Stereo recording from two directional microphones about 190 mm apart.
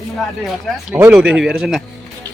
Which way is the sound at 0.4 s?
Centre (ahead or behind).